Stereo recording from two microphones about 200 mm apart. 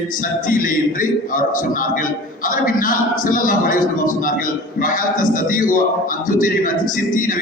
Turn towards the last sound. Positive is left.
turn(degrees=45)  # may be behind; listen again after turning